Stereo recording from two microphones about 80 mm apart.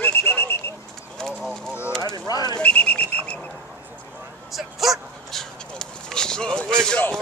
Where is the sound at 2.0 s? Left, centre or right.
Left.